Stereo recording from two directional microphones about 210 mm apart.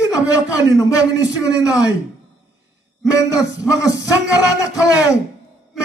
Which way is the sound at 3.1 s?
15° left (ahead or behind).